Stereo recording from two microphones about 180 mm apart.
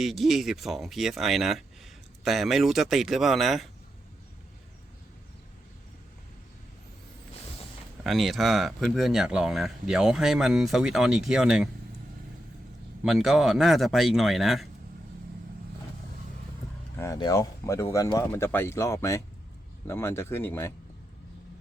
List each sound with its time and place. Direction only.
0.0 s speech: centre (ahead or behind)
8.0 s speech: centre (ahead or behind)
13.0 s speech: centre (ahead or behind)
17.0 s speech: 20° left (ahead or behind)